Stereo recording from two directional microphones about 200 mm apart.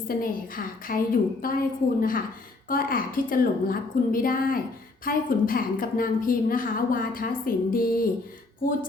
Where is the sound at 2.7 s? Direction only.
45° left (ahead or behind).